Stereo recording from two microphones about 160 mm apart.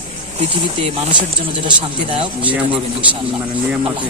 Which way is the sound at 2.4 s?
10° right (ahead or behind).